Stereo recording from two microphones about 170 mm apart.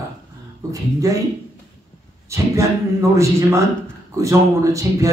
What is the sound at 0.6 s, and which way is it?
Speech, 20° right (ahead or behind).